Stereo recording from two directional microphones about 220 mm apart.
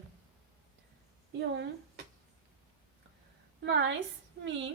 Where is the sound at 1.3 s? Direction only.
55° right (ahead or behind).